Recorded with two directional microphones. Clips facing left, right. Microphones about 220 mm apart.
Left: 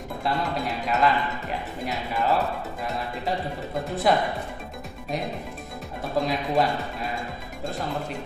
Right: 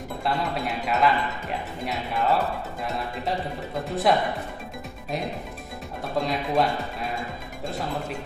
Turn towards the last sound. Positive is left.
turn(degrees=0)  # may be behind; listen again after turning